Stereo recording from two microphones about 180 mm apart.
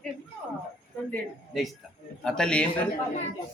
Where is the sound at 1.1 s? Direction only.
Centre (ahead or behind).